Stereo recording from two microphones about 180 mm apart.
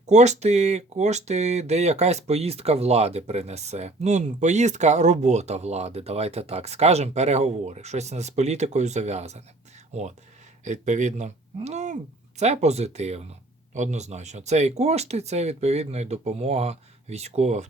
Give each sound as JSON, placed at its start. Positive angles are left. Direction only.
{"t": 0.0, "sound": "speech", "side_deg": -40}